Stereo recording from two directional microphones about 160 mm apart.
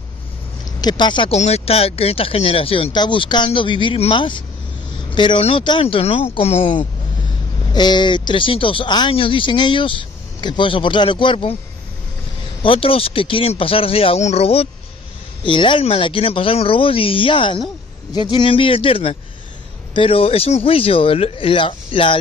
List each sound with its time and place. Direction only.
0.7 s speech: 25° left (ahead or behind)
7.7 s speech: 25° left (ahead or behind)
12.6 s speech: 35° left (ahead or behind)